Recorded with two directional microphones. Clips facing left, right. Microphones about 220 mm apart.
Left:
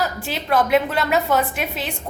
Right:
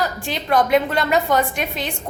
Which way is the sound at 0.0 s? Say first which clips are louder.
Right 1 dB; 5° left (ahead or behind).